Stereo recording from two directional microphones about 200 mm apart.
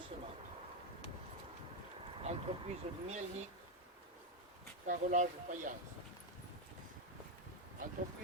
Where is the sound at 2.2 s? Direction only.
30° right (ahead or behind).